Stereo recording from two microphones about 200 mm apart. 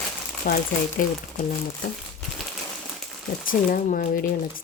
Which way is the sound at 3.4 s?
45° left (ahead or behind).